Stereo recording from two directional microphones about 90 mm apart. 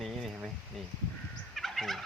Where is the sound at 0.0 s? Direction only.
Centre (ahead or behind).